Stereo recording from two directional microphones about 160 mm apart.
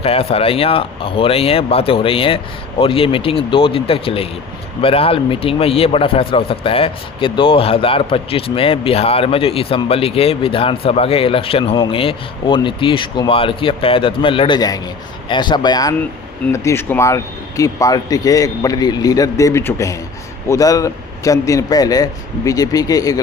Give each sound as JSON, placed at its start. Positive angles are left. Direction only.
{"t": 0.0, "sound": "a man's voice", "side_deg": 40}